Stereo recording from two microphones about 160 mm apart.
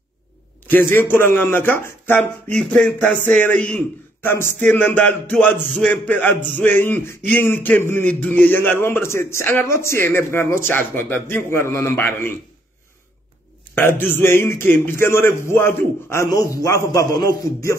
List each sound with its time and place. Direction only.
0.7 s a man's voice: 15° left (ahead or behind)
13.7 s a man's voice: 15° left (ahead or behind)